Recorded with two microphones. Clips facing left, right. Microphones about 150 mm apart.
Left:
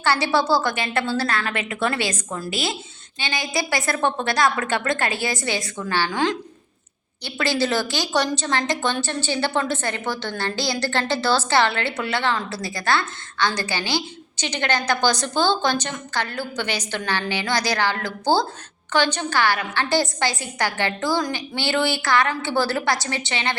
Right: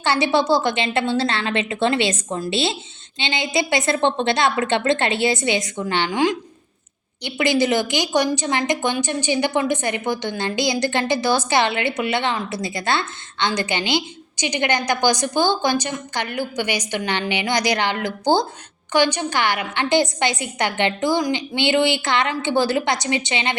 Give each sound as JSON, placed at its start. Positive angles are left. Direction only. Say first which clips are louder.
{"t": 0.0, "sound": "a woman's voice", "louder": "right 2 dB", "side_deg": -20}